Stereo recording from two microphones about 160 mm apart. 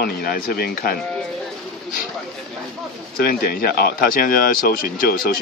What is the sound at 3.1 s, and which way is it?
Speech, 70° left (ahead or behind).